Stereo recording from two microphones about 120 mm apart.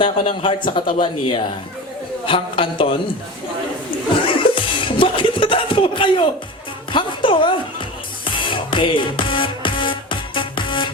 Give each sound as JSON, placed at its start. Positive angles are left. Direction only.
{"t": 0.0, "sound": "a man's voice", "side_deg": 45}
{"t": 4.5, "sound": "music", "side_deg": 45}
{"t": 6.9, "sound": "a man's voice", "side_deg": 45}
{"t": 8.2, "sound": "music", "side_deg": 45}